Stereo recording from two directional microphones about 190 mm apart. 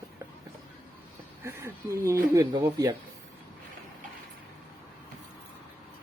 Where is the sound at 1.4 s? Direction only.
15° right (ahead or behind).